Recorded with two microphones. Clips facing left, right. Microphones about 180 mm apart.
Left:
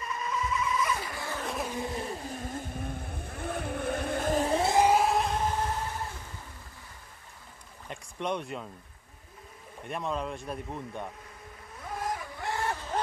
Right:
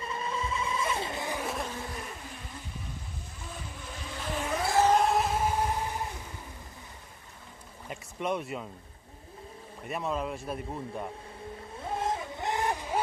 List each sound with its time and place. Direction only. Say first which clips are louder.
0.0 s vehicle: left 1 dB; 30° right (ahead or behind)
1.4 s insect: even; centre (ahead or behind)
1.7 s vehicle: left 5 dB; 20° left (ahead or behind); by 4.6 s 40° left (ahead or behind)
4.6 s a sound: right 1 dB; 20° left (ahead or behind)
4.8 s vehicle: even; 5° left (ahead or behind); by 6.1 s 15° right (ahead or behind)
7.9 s boat: right 1 dB; 5° right (ahead or behind)
9.8 s a man's voice: right 1 dB; 5° right (ahead or behind)
11.8 s vehicle: right 3 dB; 25° right (ahead or behind)